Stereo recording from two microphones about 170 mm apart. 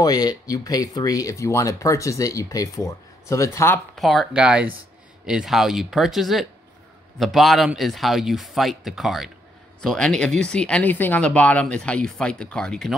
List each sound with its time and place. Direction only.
0.0 s speech: 25° left (ahead or behind)
3.9 s speech: centre (ahead or behind)